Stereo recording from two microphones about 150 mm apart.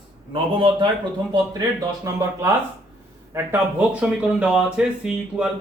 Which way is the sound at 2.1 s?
20° right (ahead or behind).